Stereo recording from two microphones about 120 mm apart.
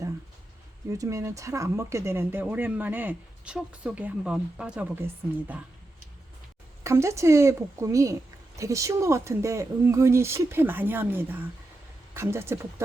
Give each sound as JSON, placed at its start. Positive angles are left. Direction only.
{"t": 0.9, "sound": "speech", "side_deg": -25}
{"t": 4.9, "sound": "speech", "side_deg": -20}
{"t": 6.8, "sound": "speech", "side_deg": -25}